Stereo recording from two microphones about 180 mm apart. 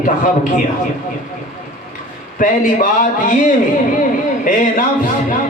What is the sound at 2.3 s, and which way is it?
A man's voice, 50° left (ahead or behind).